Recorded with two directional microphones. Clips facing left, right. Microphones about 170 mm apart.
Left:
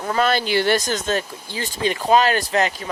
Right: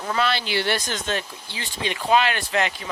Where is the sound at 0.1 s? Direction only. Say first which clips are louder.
Left 5 dB; 45° left (ahead or behind).